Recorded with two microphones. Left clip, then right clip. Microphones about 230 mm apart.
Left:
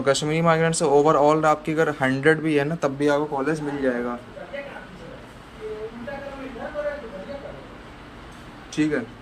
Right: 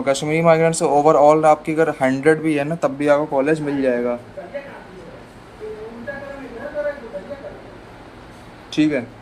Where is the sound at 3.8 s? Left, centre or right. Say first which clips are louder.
Right 5 dB; right.